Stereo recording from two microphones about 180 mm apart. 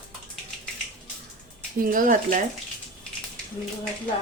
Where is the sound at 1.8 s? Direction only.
50° right (ahead or behind).